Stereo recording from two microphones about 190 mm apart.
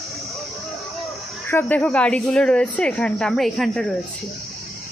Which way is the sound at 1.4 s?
10° left (ahead or behind).